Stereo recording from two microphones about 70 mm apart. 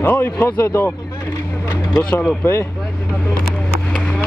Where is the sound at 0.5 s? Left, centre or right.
Left.